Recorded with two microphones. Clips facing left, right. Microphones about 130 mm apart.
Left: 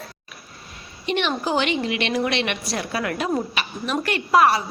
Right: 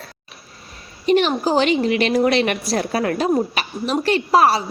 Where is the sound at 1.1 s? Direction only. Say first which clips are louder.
Right 6 dB; 40° right (ahead or behind).